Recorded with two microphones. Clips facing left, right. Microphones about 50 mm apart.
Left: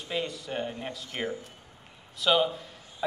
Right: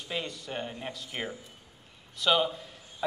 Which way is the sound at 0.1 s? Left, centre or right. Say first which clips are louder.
Left 3 dB; centre.